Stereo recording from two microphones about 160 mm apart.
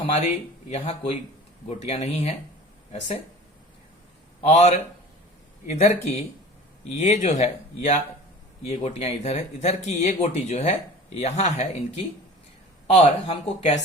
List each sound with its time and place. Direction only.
0.1 s speech: 45° left (ahead or behind)
4.4 s speech: 45° left (ahead or behind)